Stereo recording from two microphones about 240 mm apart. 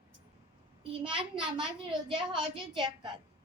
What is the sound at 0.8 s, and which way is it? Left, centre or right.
Speech, right.